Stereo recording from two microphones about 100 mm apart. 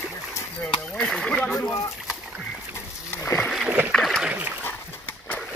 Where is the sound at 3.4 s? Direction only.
Centre (ahead or behind).